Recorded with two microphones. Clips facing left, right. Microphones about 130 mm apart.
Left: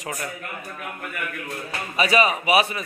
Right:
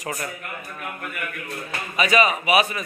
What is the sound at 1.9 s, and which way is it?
Speech, 30° left (ahead or behind).